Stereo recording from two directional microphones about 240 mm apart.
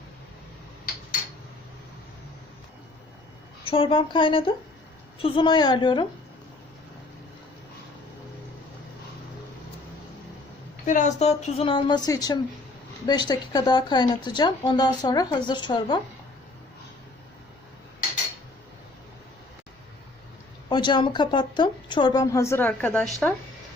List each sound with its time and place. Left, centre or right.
3.7 s speech: left
10.8 s speech: left
20.7 s speech: centre